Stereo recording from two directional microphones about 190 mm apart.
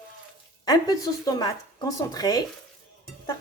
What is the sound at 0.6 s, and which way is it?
Speech, 20° left (ahead or behind).